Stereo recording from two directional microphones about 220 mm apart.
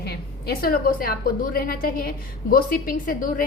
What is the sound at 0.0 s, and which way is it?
A woman's voice, 45° left (ahead or behind).